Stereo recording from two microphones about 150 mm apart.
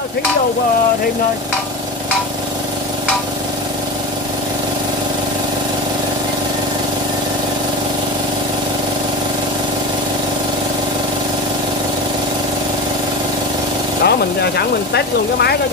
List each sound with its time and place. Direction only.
14.0 s speech: 90° left